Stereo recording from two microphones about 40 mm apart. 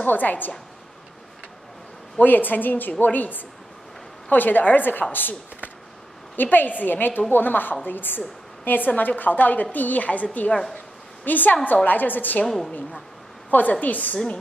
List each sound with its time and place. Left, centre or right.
0.0 s a woman's voice: left
2.2 s a woman's voice: left
11.2 s a woman's voice: left
12.4 s a woman's voice: centre
13.5 s a woman's voice: left